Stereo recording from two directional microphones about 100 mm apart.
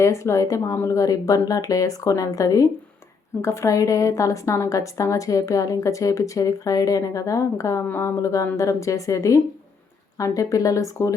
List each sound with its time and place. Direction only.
0.0 s a woman's voice: 30° left (ahead or behind)